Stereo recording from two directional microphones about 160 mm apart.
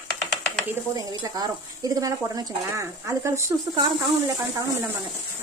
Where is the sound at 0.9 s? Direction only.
25° right (ahead or behind).